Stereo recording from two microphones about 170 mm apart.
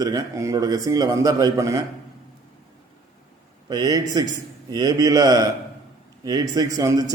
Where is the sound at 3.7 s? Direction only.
25° right (ahead or behind).